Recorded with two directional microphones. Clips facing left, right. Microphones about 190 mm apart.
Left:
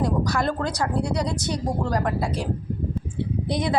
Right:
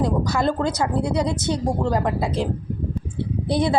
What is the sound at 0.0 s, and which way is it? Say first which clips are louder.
Speech: right 2 dB; 25° right (ahead or behind).